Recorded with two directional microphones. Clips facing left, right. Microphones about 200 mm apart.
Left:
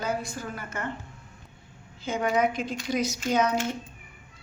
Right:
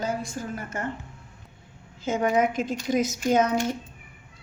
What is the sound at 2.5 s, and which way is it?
A woman's voice, 45° right (ahead or behind).